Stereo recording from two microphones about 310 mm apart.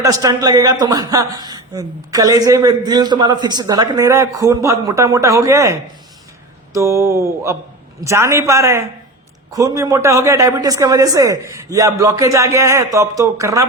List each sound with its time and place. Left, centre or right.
0.0 s a man's voice: centre
6.7 s a man's voice: centre